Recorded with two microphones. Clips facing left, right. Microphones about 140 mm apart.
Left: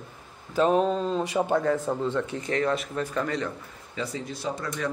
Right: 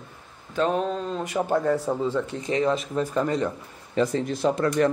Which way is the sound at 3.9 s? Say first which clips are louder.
Right 9 dB; 50° right (ahead or behind).